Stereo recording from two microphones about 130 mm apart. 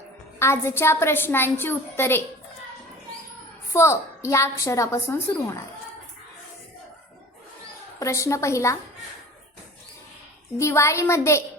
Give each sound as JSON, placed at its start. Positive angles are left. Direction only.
{"t": 0.3, "sound": "a woman's voice", "side_deg": 20}
{"t": 3.7, "sound": "a woman's voice", "side_deg": 20}
{"t": 7.9, "sound": "a woman's voice", "side_deg": 25}
{"t": 10.6, "sound": "a woman's voice", "side_deg": 20}